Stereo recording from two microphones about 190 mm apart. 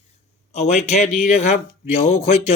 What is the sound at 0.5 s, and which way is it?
Speech, 35° left (ahead or behind).